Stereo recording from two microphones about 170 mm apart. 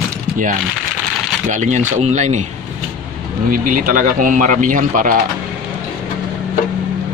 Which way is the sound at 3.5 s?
55° right (ahead or behind).